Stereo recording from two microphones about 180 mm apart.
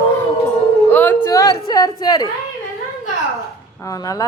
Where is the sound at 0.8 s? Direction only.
10° left (ahead or behind).